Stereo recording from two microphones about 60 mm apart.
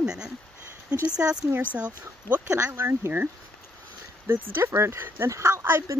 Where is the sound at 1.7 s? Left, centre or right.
Right.